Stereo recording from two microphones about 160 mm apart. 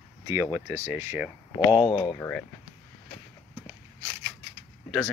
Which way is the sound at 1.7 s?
30° left (ahead or behind).